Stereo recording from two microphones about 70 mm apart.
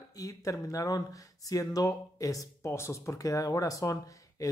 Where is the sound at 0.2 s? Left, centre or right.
Left.